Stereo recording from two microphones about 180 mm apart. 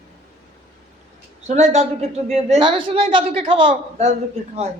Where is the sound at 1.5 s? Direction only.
40° right (ahead or behind).